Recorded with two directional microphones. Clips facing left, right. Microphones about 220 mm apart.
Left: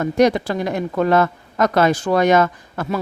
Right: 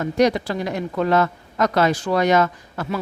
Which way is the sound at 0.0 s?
50° left (ahead or behind).